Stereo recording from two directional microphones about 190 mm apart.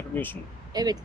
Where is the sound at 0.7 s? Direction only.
20° right (ahead or behind).